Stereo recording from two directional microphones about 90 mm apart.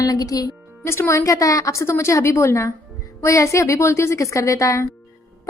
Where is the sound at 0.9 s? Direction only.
25° left (ahead or behind).